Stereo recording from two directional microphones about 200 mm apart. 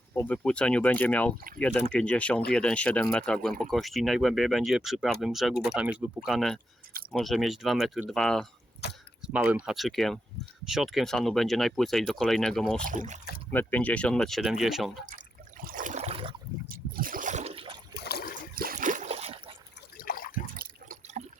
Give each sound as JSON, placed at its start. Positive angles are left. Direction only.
{"t": 0.1, "sound": "speech", "side_deg": 10}
{"t": 12.8, "sound": "speech", "side_deg": -40}
{"t": 13.5, "sound": "speech", "side_deg": 10}
{"t": 15.6, "sound": "a sound", "side_deg": -40}
{"t": 16.6, "sound": "a sound", "side_deg": -45}
{"t": 18.1, "sound": "trickle", "side_deg": 50}
{"t": 18.5, "sound": "a sound", "side_deg": -45}
{"t": 20.0, "sound": "water", "side_deg": 45}
{"t": 20.6, "sound": "drip", "side_deg": -35}